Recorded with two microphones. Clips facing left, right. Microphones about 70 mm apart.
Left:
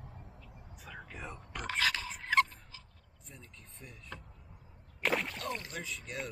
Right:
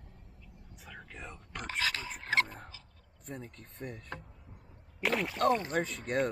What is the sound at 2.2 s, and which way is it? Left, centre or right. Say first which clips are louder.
Fowl: left 2 dB; right.